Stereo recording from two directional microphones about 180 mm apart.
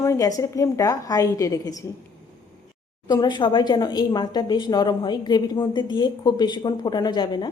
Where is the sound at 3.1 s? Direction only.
25° left (ahead or behind).